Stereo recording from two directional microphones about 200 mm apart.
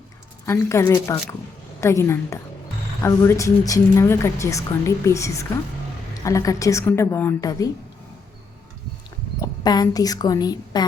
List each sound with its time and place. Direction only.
0.4 s a woman's voice: 15° left (ahead or behind)
9.4 s a woman's voice: 20° left (ahead or behind)